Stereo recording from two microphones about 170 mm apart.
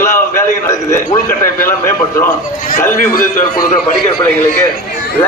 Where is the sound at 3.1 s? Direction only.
55° left (ahead or behind).